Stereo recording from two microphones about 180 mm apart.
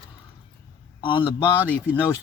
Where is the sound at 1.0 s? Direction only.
30° left (ahead or behind).